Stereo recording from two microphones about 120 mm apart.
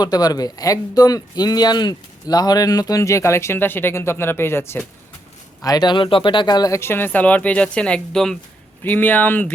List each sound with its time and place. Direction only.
0.0 s speech: 35° left (ahead or behind)
5.6 s speech: 35° left (ahead or behind); by 8.4 s 5° left (ahead or behind)
8.8 s speech: 15° left (ahead or behind)